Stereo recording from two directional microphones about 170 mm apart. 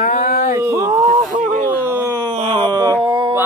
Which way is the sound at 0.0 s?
55° left (ahead or behind).